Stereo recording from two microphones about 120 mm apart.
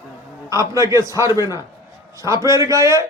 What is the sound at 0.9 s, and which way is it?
A man's voice, 25° right (ahead or behind).